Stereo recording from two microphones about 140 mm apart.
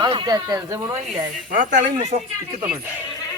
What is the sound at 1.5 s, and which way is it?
Speech, 70° right (ahead or behind).